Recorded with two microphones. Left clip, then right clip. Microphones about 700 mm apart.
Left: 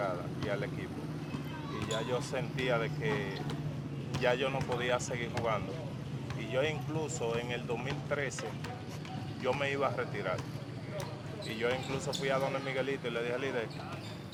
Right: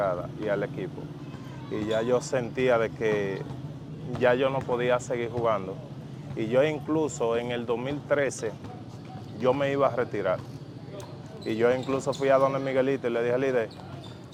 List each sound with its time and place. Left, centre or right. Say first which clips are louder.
0.0 s speech: right 8 dB; right
1.9 s speech: right 10 dB; right
11.6 s speech: right 10 dB; right